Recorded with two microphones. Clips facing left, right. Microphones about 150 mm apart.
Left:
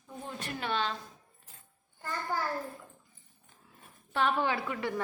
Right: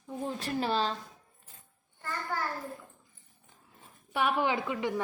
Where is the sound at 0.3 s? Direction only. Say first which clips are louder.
Right 4 dB; 35° right (ahead or behind).